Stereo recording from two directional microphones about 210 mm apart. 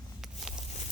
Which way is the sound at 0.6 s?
30° left (ahead or behind).